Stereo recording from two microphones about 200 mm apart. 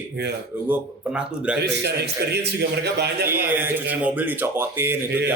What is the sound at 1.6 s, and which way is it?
Speech, 55° right (ahead or behind).